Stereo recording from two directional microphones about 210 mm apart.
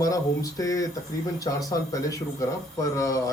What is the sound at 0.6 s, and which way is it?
A man's voice, 15° left (ahead or behind).